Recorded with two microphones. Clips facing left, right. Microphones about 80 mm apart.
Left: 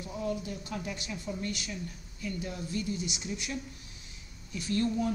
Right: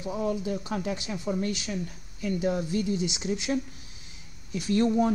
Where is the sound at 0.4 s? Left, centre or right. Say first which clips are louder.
Right 7 dB; right.